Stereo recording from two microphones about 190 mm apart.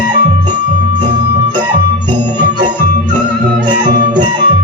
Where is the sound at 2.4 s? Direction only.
25° right (ahead or behind).